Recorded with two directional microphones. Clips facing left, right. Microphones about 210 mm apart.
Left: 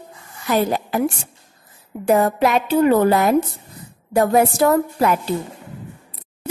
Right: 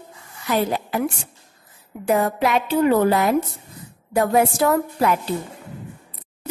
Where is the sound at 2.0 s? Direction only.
45° left (ahead or behind).